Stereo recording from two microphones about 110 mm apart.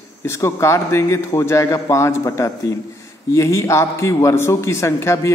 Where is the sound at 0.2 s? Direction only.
25° left (ahead or behind).